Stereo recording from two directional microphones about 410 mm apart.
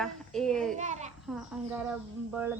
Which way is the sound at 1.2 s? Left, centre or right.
Centre.